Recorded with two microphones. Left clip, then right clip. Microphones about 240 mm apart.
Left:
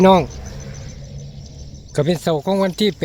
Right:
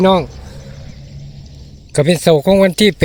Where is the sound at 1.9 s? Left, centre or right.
Right.